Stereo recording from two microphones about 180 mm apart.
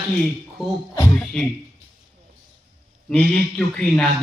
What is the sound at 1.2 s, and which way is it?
Speech, 5° left (ahead or behind).